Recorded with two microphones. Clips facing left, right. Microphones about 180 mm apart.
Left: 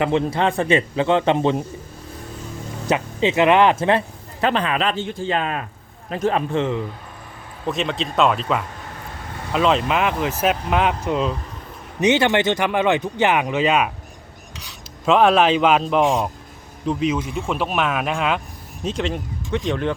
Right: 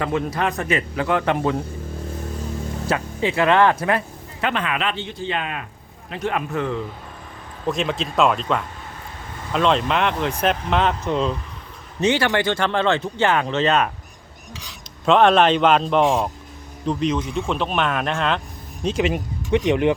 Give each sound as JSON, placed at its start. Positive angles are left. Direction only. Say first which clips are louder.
{"t": 0.0, "sound": "a man's voice", "louder": "left 3 dB", "side_deg": 25}
{"t": 2.8, "sound": "speech", "louder": "left 3 dB", "side_deg": 20}
{"t": 6.5, "sound": "a man's voice", "louder": "left 3 dB", "side_deg": 20}
{"t": 7.6, "sound": "speech", "louder": "even", "side_deg": 0}
{"t": 11.9, "sound": "speech", "louder": "left 2 dB", "side_deg": 20}
{"t": 15.0, "sound": "speech", "louder": "even", "side_deg": 5}